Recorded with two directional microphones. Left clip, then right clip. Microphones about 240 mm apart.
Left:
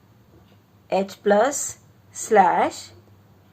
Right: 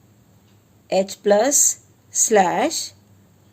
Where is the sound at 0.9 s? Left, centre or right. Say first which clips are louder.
Right 3 dB; right.